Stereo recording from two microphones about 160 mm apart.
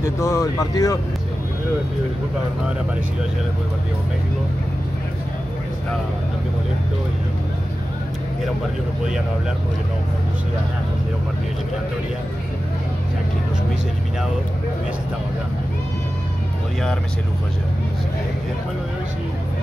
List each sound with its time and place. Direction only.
0.0 s speech: 20° left (ahead or behind)